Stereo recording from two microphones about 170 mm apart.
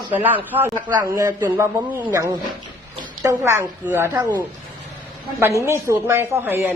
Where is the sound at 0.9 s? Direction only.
25° right (ahead or behind).